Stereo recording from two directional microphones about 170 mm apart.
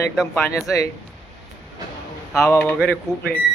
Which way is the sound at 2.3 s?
15° left (ahead or behind).